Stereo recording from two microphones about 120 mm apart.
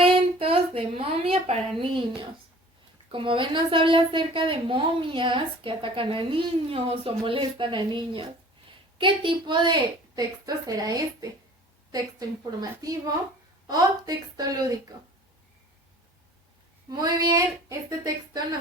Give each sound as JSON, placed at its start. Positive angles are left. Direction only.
{"t": 0.0, "sound": "a sound", "side_deg": -50}
{"t": 3.1, "sound": "a woman's voice", "side_deg": -45}
{"t": 12.8, "sound": "a woman's voice", "side_deg": -30}
{"t": 16.9, "sound": "a woman's voice", "side_deg": -35}